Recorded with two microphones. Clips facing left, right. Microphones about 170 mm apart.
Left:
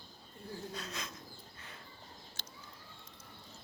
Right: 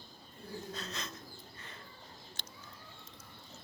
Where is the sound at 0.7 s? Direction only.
10° left (ahead or behind).